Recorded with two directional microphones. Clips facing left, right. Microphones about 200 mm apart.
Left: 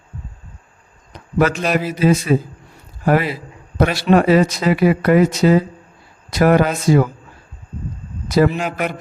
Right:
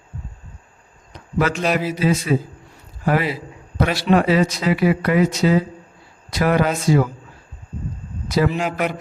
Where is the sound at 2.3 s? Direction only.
50° left (ahead or behind).